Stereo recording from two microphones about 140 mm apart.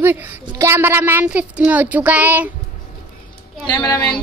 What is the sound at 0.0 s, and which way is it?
Speech, 15° right (ahead or behind).